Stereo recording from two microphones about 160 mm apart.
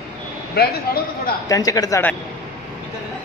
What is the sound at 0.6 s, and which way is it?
Speech, 75° left (ahead or behind).